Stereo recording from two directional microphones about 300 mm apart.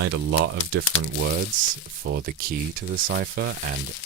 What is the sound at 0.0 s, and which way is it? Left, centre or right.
Speech, right.